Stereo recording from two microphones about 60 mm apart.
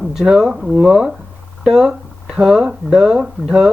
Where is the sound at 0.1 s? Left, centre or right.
Centre.